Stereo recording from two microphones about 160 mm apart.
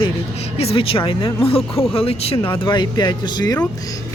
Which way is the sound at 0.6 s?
35° left (ahead or behind).